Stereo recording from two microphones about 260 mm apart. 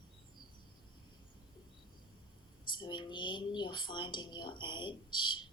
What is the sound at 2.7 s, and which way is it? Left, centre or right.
A woman's voice, centre.